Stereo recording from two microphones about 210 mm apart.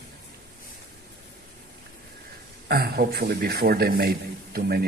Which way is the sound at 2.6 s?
45° right (ahead or behind).